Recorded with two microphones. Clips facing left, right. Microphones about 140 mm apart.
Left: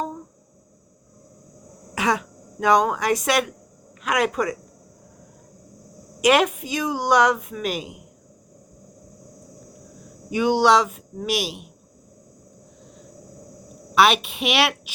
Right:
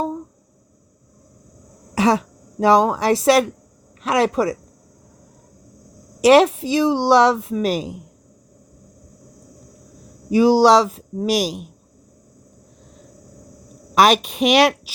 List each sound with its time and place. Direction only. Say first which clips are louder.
2.0 s speech: right 6 dB; 35° right (ahead or behind)
6.2 s speech: right 6 dB; 30° right (ahead or behind)
10.2 s speech: right 5 dB; 35° right (ahead or behind)
13.9 s speech: right 3 dB; 40° right (ahead or behind)